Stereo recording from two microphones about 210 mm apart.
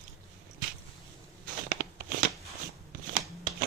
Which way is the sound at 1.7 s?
45° right (ahead or behind).